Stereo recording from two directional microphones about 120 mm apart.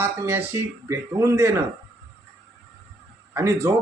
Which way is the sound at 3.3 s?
25° right (ahead or behind).